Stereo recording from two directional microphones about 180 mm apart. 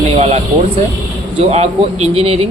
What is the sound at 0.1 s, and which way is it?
A man's voice, 35° right (ahead or behind).